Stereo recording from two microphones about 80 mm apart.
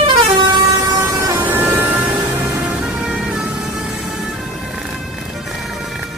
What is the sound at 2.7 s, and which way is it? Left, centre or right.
Vehicle, centre.